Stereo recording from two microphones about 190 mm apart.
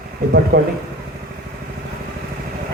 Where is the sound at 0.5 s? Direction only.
60° right (ahead or behind).